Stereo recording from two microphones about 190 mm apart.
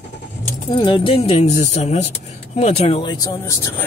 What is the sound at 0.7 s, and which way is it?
Speech, 25° left (ahead or behind).